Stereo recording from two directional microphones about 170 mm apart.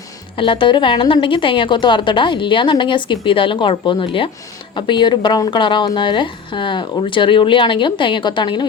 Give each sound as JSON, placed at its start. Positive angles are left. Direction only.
{"t": 0.3, "sound": "a woman's voice", "side_deg": 30}